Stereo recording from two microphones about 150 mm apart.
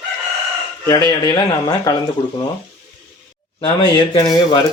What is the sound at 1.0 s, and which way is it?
Speech, 30° left (ahead or behind).